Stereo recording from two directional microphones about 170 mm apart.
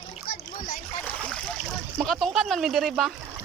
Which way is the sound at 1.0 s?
5° left (ahead or behind).